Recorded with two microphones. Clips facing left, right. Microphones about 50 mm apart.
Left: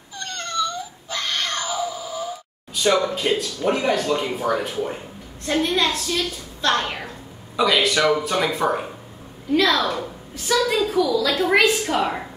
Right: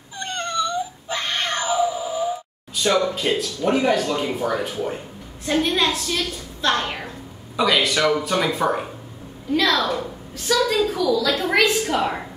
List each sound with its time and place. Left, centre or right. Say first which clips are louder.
0.2 s cat: right 1 dB; centre
2.7 s a man's voice: even; centre